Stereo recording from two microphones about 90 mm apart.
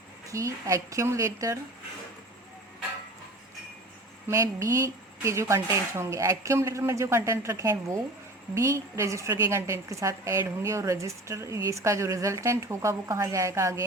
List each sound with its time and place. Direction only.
0.3 s a woman's voice: 35° right (ahead or behind)
4.3 s a woman's voice: 35° right (ahead or behind)